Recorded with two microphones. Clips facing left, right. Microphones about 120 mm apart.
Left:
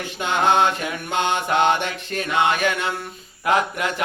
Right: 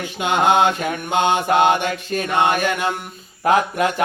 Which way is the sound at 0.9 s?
45° right (ahead or behind).